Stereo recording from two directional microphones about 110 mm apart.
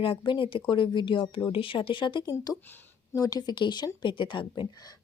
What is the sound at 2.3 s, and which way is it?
A woman's voice, 35° left (ahead or behind).